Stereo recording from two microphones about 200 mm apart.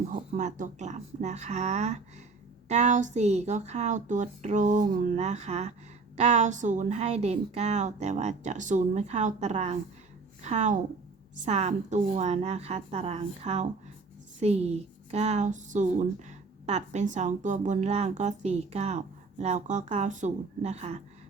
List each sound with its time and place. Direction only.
0.1 s a woman's voice: 40° right (ahead or behind)